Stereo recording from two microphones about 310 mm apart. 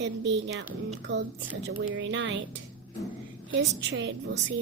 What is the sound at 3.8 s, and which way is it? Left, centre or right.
Speech, right.